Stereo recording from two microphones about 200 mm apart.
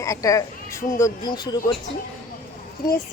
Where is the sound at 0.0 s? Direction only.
15° left (ahead or behind).